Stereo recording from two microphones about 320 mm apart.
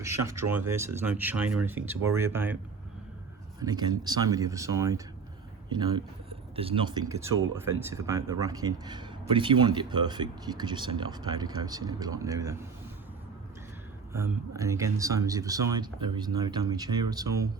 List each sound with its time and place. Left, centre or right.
0.3 s speech: centre
3.6 s speech: centre
6.6 s speech: centre
14.1 s speech: centre